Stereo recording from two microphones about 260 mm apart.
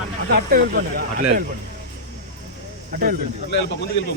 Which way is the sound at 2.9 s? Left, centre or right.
Right.